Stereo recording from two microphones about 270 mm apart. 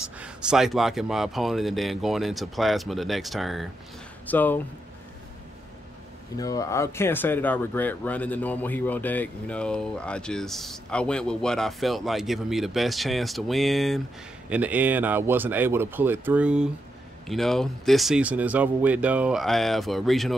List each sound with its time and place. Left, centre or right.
0.2 s speech: centre
6.3 s speech: centre